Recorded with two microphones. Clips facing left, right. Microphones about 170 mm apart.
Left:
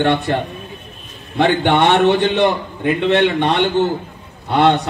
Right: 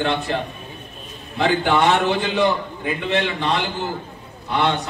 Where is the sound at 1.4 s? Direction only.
70° left (ahead or behind).